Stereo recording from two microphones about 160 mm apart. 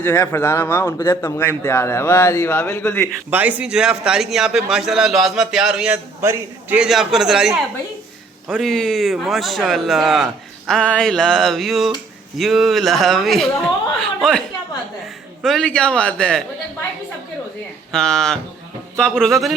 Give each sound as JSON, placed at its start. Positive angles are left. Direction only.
{"t": 0.0, "sound": "speech", "side_deg": 10}
{"t": 3.2, "sound": "a man's voice", "side_deg": -10}
{"t": 15.4, "sound": "a man's voice", "side_deg": 5}
{"t": 17.9, "sound": "a man's voice", "side_deg": 5}